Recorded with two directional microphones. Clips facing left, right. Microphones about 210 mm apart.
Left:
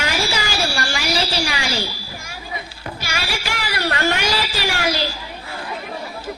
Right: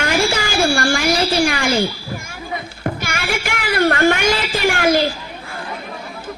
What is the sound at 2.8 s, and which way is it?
Music, 50° right (ahead or behind).